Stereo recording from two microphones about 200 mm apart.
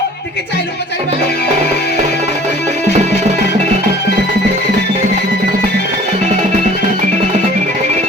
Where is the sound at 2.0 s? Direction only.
35° right (ahead or behind).